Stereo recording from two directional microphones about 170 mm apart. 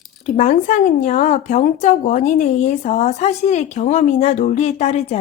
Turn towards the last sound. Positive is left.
turn(degrees=40)  # may be behind; listen again after turning